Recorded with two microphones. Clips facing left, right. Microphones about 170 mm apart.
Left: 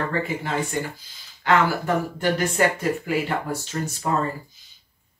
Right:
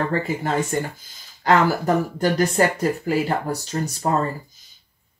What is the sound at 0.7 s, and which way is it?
Speech, 45° right (ahead or behind).